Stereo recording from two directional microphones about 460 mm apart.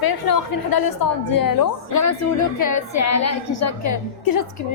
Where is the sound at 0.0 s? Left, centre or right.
Left.